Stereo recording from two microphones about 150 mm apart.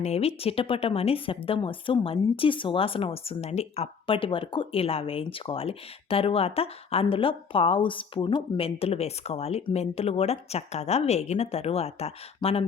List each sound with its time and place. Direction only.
0.0 s speech: 45° left (ahead or behind)